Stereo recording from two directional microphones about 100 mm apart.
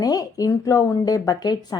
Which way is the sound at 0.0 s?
40° left (ahead or behind).